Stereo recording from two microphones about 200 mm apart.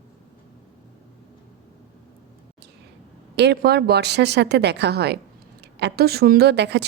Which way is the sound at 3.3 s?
60° right (ahead or behind).